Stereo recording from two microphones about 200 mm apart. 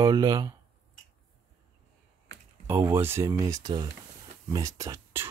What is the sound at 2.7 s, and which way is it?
Speech, 10° right (ahead or behind).